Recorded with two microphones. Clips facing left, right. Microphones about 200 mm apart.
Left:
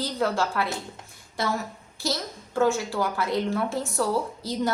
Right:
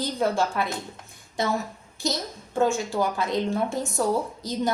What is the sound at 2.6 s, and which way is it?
A woman's voice, 15° right (ahead or behind).